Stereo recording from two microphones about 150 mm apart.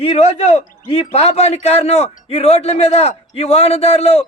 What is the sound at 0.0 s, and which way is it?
A man's voice, 45° left (ahead or behind).